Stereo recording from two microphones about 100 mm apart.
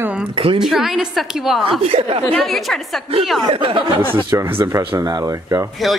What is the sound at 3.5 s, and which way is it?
Speech, 55° right (ahead or behind).